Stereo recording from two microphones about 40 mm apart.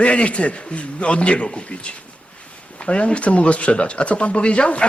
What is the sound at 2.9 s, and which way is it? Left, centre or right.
Speech, left.